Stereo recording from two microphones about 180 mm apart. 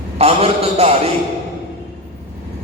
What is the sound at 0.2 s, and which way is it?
Speech, 35° right (ahead or behind).